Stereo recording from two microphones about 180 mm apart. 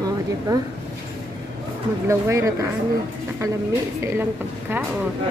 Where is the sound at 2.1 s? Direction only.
15° right (ahead or behind).